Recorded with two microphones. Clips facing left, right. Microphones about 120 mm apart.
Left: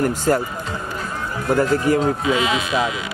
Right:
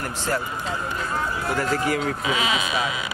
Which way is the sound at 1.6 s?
30° left (ahead or behind).